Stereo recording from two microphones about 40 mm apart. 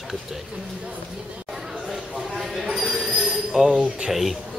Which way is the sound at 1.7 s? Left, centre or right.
Centre.